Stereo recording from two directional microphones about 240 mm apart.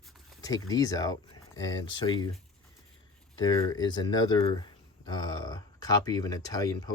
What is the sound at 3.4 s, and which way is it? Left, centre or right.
Speech, centre.